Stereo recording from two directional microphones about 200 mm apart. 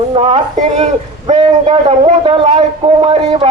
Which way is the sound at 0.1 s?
25° right (ahead or behind).